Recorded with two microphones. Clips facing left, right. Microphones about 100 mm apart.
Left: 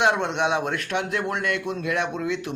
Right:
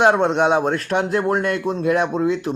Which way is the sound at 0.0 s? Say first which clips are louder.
Right 6 dB; 40° right (ahead or behind).